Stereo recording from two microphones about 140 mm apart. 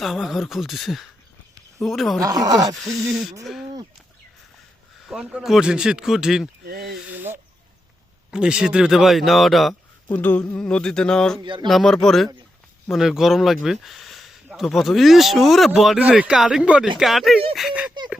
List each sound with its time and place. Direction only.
0.0 s speech: centre (ahead or behind)
2.2 s speech: 25° right (ahead or behind)
2.7 s speech: centre (ahead or behind)
5.0 s speech: 5° right (ahead or behind)
7.1 s bird: 15° right (ahead or behind)
8.3 s speech: 5° right (ahead or behind)
10.1 s speech: 10° left (ahead or behind)
11.4 s speech: 35° right (ahead or behind)
11.7 s speech: 5° left (ahead or behind)